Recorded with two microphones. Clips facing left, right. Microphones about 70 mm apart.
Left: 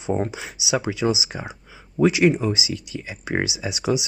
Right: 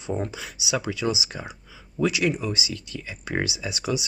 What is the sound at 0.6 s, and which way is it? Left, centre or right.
Speech, left.